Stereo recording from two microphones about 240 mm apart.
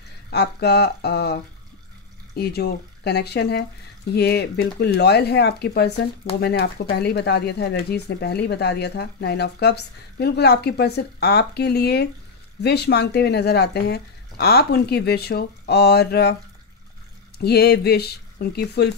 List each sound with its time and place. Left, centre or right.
0.3 s speech: left
17.4 s speech: left